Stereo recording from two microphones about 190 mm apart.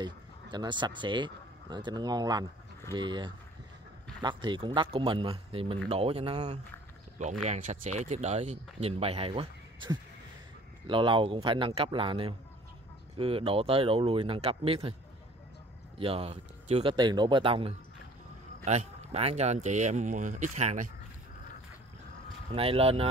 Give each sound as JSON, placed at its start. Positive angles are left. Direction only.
{"t": 0.0, "sound": "speech", "side_deg": -25}
{"t": 16.0, "sound": "speech", "side_deg": -30}
{"t": 22.5, "sound": "speech", "side_deg": -30}